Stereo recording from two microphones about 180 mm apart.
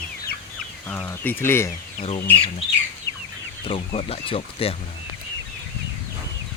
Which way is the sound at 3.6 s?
30° left (ahead or behind).